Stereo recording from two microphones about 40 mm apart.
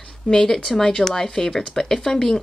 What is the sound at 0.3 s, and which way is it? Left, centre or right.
Speech, centre.